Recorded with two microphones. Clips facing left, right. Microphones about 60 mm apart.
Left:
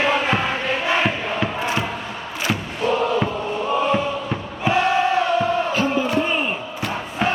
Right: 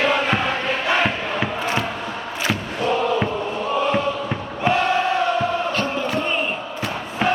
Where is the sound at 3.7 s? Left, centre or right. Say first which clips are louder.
Left 1 dB; centre.